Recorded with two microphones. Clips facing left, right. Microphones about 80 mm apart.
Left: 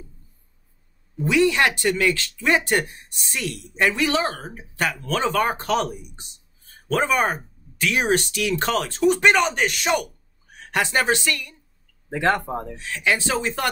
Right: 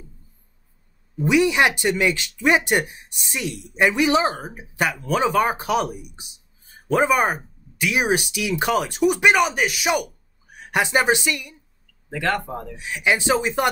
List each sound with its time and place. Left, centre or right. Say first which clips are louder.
1.2 s a woman's voice: right 1 dB; centre
12.1 s speech: left 2 dB; left
12.7 s speech: right 3 dB; centre